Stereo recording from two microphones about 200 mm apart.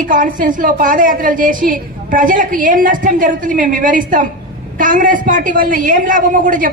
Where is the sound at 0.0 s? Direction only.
40° right (ahead or behind).